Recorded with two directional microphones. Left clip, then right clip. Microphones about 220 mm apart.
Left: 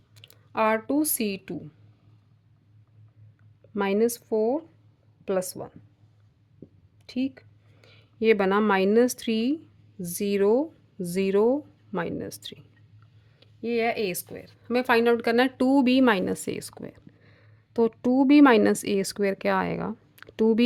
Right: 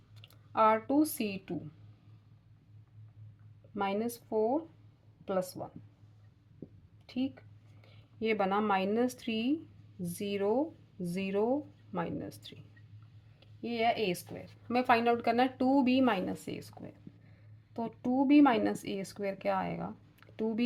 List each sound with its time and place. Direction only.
0.2 s speech: 45° left (ahead or behind)
3.8 s speech: 45° left (ahead or behind)
7.1 s a woman's voice: 45° left (ahead or behind)